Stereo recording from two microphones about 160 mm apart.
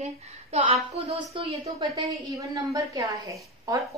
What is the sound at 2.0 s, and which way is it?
A woman's voice, 20° right (ahead or behind).